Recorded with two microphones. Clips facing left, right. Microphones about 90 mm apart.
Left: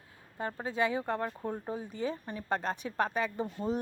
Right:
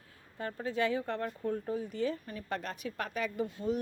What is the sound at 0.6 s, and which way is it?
Speech, 20° left (ahead or behind).